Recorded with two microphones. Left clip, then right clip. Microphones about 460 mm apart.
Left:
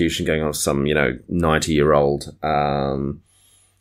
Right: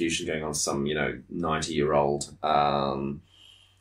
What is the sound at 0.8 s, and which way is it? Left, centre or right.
Speech, left.